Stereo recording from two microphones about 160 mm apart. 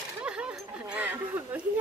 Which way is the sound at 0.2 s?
5° right (ahead or behind).